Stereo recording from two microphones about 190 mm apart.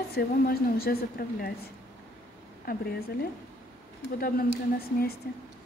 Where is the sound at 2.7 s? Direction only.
50° left (ahead or behind).